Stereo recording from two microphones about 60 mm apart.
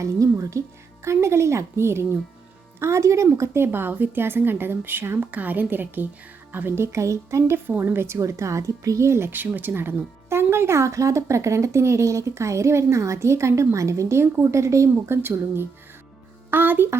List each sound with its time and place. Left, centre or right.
0.0 s speech: right
1.0 s speech: right
3.7 s a woman's voice: right
7.7 s speech: right
15.1 s a woman's voice: right